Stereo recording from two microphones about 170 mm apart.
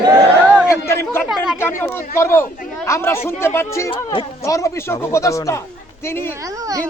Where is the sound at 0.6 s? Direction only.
15° left (ahead or behind).